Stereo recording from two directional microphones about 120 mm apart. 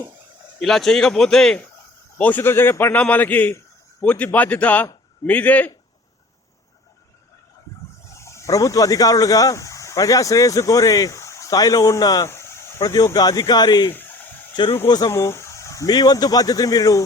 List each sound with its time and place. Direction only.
0.6 s a man's voice: 5° left (ahead or behind)
8.1 s speech: 25° left (ahead or behind)
12.3 s speech: 20° left (ahead or behind)
13.9 s fowl: 15° left (ahead or behind)
14.5 s speech: 40° left (ahead or behind)